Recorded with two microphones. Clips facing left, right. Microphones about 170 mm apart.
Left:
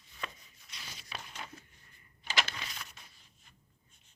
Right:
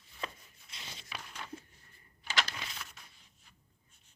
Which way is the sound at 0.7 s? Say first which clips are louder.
Right 1 dB; 25° right (ahead or behind).